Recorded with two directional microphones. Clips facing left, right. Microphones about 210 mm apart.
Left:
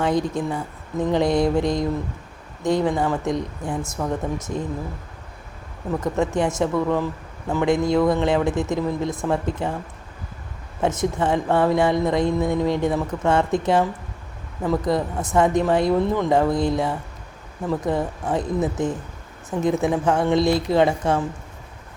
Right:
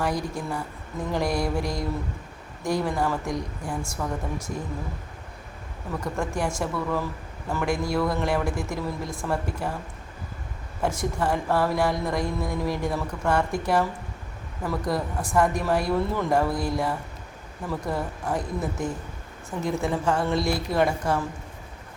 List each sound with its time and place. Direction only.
0.0 s speech: 20° left (ahead or behind)
6.1 s speech: 20° left (ahead or behind)
10.8 s speech: 20° left (ahead or behind)